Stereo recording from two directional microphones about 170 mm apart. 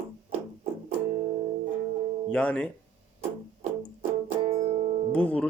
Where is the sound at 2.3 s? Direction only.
5° left (ahead or behind).